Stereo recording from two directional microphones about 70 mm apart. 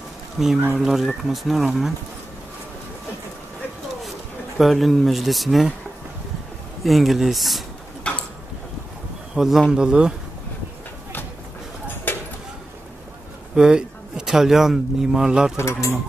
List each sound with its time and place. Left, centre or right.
0.4 s speech: centre
4.6 s speech: centre
6.8 s speech: centre
9.3 s a man's voice: centre
12.1 s a sound: left
13.6 s a man's voice: centre
15.5 s speech: left